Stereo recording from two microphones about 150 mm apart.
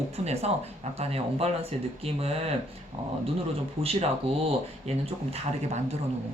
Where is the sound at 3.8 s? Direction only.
45° right (ahead or behind).